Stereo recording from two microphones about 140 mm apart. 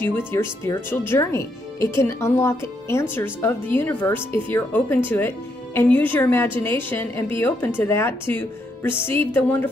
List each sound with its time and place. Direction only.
0.3 s speech: 20° left (ahead or behind)